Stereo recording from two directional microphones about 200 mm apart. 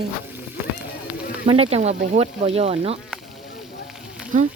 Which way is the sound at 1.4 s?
30° right (ahead or behind).